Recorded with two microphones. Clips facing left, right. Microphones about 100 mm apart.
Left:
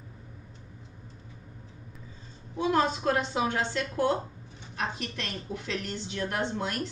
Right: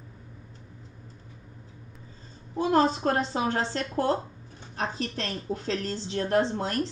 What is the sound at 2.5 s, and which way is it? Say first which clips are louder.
A woman's voice: right 3 dB; 40° right (ahead or behind).